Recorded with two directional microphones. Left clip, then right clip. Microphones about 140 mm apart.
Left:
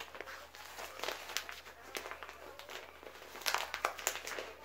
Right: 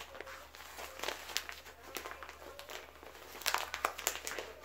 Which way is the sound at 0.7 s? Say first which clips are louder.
Even; 20° right (ahead or behind).